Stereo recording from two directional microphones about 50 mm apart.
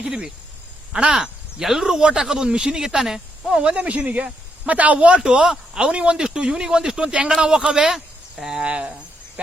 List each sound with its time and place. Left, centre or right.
0.0 s speech: centre
3.6 s speech: right
5.2 s speech: centre